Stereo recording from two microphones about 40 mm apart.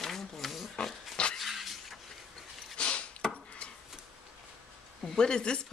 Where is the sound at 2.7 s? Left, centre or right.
Left.